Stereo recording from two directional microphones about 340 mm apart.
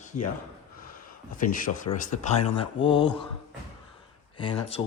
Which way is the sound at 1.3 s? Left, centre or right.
Left.